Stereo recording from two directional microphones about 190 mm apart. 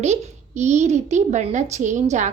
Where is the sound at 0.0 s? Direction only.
35° right (ahead or behind).